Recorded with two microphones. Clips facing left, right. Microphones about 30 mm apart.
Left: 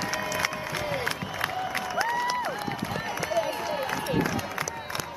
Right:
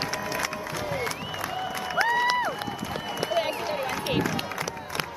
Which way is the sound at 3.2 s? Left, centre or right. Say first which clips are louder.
Right 2 dB; right.